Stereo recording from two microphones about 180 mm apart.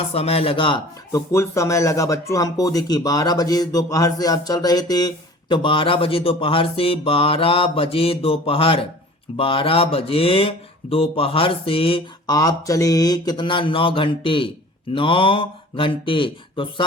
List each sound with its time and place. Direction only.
0.1 s speech: 35° left (ahead or behind)
1.3 s speech: 15° left (ahead or behind)